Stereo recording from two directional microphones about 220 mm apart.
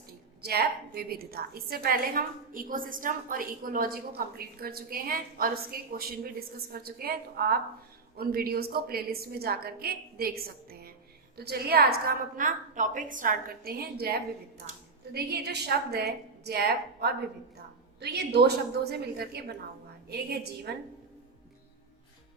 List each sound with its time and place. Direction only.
0.4 s a woman's voice: 45° right (ahead or behind)